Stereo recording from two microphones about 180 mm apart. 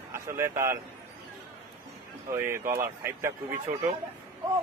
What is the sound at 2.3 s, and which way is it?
Speech, 15° right (ahead or behind).